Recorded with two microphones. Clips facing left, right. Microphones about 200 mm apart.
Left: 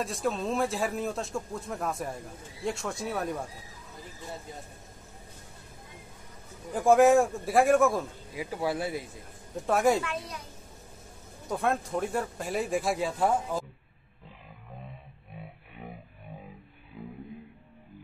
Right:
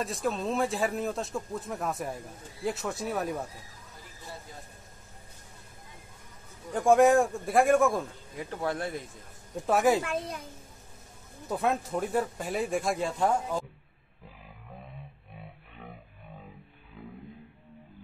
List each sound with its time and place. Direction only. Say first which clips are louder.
0.0 s a man's voice: even; centre (ahead or behind)
6.7 s a man's voice: left 1 dB; centre (ahead or behind)
10.0 s a child's voice: right 3 dB; 50° right (ahead or behind)
11.4 s a man's voice: even; centre (ahead or behind)